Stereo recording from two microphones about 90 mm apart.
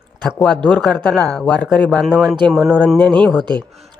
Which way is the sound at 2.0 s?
Centre (ahead or behind).